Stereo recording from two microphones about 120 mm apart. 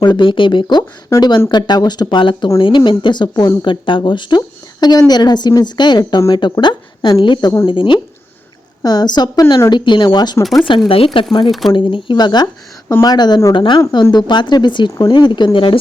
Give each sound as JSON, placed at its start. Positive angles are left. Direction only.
{"t": 0.0, "sound": "speech", "side_deg": 40}
{"t": 10.4, "sound": "speech", "side_deg": 0}
{"t": 10.8, "sound": "speech", "side_deg": 50}